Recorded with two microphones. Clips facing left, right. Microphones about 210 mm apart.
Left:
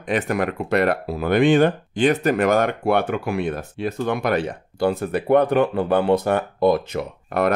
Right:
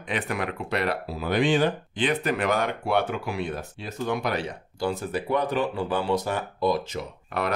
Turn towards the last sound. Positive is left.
turn(degrees=55)  # may be behind; listen again after turning